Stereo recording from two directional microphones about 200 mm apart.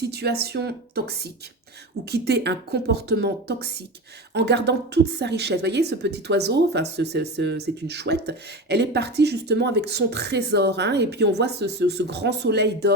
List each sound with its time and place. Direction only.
0.0 s speech: 55° right (ahead or behind)